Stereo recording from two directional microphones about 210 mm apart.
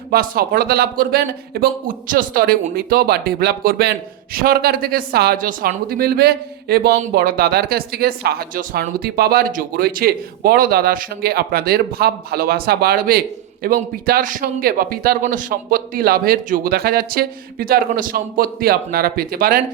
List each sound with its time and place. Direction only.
0.1 s speech: 45° right (ahead or behind)